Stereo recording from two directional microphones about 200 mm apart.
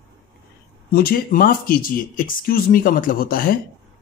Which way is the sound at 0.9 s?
45° left (ahead or behind).